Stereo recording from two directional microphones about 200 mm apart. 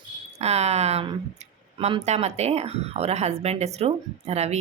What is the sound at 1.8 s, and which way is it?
A woman's voice, 30° right (ahead or behind).